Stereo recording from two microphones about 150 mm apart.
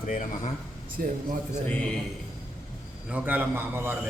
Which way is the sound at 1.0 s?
75° right (ahead or behind).